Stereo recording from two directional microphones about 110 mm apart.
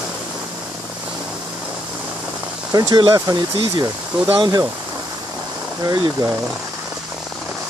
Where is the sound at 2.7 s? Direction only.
35° right (ahead or behind).